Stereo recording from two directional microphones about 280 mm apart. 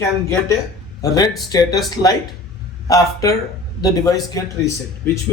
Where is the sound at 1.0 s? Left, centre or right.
Centre.